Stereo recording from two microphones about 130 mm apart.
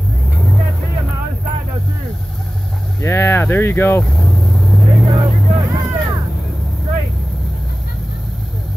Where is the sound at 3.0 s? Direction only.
20° left (ahead or behind).